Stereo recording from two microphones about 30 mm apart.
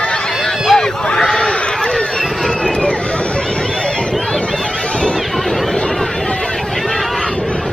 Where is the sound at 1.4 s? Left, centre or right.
Centre.